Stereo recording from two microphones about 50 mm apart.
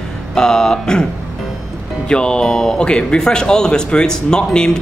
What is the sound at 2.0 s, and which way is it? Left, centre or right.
Speech, centre.